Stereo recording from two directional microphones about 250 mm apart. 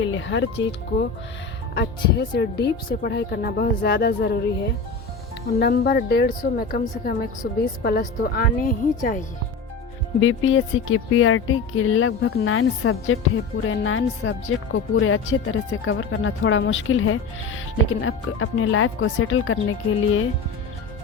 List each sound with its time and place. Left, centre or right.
0.0 s speech: left
5.5 s speech: left
10.2 s speech: left
12.5 s speech: left